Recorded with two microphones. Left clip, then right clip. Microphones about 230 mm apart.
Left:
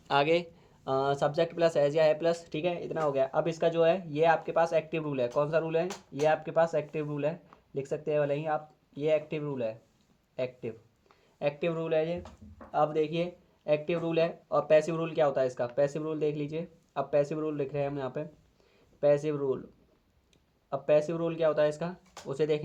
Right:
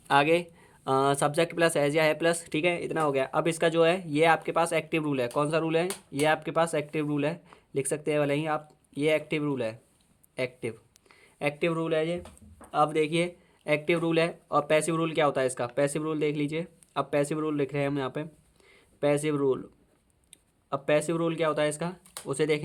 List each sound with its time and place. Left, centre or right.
0.1 s speech: right
20.7 s speech: right